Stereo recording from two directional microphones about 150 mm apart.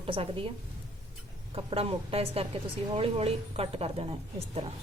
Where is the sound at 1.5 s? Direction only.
40° right (ahead or behind).